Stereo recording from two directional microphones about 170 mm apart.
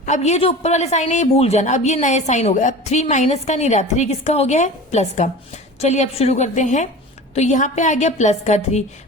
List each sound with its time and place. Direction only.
0.0 s a woman's voice: 45° left (ahead or behind)